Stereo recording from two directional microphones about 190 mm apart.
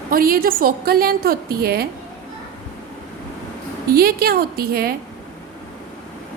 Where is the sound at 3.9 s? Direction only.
55° right (ahead or behind).